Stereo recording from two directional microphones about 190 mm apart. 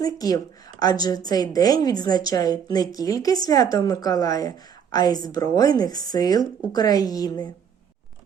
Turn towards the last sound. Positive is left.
turn(degrees=20)  # may be behind; listen again after turning